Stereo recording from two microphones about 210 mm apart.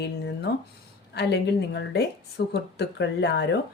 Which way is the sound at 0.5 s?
50° left (ahead or behind).